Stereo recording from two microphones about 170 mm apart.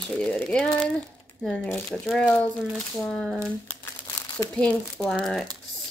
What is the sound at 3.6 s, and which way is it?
Crumpling, 20° left (ahead or behind).